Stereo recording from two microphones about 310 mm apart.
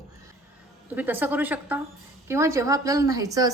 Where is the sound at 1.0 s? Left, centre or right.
Centre.